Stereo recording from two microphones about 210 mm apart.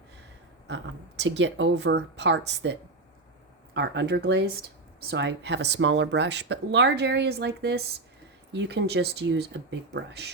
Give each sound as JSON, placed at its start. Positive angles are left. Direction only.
{"t": 1.2, "sound": "speech", "side_deg": -55}
{"t": 3.8, "sound": "speech", "side_deg": -55}